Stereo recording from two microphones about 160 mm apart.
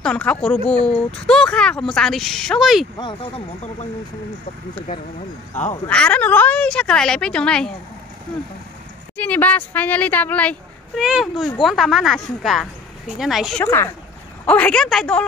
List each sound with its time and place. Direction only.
0.0 s speech: 5° left (ahead or behind)
3.0 s speech: 30° left (ahead or behind)
5.5 s speech: 45° left (ahead or behind)
5.9 s a woman's voice: 5° left (ahead or behind)
9.1 s a woman's voice: 10° left (ahead or behind)
11.0 s speech: centre (ahead or behind)
13.7 s a woman's voice: 15° left (ahead or behind)